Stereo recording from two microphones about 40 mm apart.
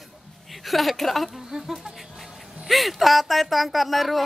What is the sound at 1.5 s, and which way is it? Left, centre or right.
Speech, centre.